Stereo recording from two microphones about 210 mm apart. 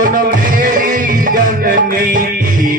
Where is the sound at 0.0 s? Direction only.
40° right (ahead or behind).